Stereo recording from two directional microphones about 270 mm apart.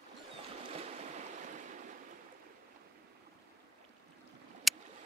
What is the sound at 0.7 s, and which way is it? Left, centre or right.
Waves, right.